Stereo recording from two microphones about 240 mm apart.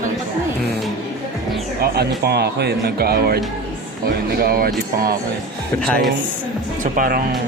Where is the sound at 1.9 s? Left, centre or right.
Right.